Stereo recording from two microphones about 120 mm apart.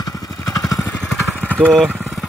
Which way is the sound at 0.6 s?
30° left (ahead or behind).